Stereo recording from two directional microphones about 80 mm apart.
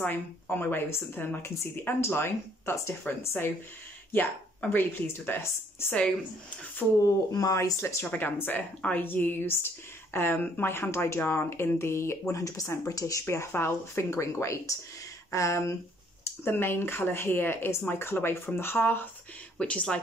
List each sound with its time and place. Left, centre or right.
0.0 s a woman's voice: left
6.8 s speech: centre
7.3 s speech: left
7.8 s speech: left
8.1 s a woman's voice: left
16.4 s a woman's voice: left
19.6 s speech: centre